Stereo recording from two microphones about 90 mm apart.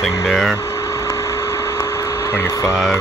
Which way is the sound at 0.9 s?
30° left (ahead or behind).